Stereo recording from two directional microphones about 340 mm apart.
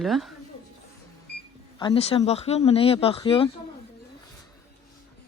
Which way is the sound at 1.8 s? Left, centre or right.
Centre.